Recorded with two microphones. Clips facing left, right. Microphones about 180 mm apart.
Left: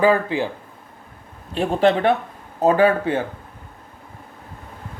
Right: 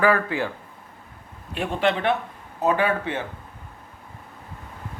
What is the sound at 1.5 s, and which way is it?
A man's voice, 35° left (ahead or behind).